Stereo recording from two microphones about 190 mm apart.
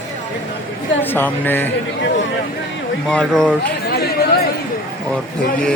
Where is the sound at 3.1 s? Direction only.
5° left (ahead or behind).